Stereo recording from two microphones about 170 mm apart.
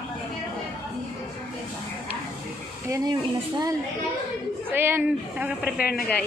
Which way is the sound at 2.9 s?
20° right (ahead or behind).